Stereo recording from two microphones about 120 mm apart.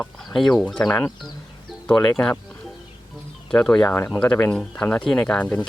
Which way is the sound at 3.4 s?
5° left (ahead or behind).